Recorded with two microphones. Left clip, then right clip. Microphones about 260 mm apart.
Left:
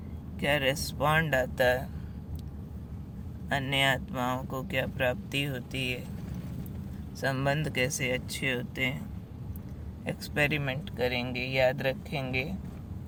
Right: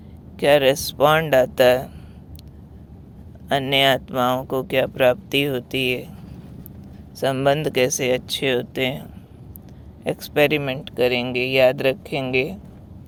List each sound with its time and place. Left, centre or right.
0.3 s speech: right
3.5 s speech: right
7.2 s speech: right